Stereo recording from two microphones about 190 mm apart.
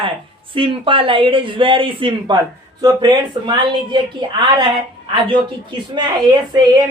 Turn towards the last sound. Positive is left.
turn(degrees=-20)  # may be behind; listen again after turning